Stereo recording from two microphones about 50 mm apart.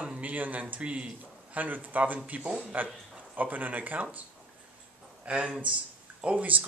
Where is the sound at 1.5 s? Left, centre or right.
Right.